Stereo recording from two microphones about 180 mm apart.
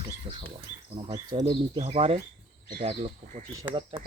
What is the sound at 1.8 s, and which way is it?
Speech, 35° right (ahead or behind).